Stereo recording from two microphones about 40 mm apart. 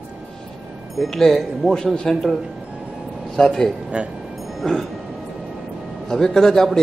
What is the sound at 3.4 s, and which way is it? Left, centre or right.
Speech, centre.